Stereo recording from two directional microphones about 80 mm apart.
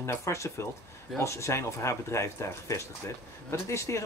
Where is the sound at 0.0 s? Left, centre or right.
Left.